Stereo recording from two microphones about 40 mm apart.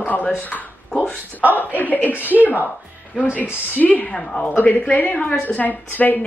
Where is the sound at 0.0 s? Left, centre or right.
Left.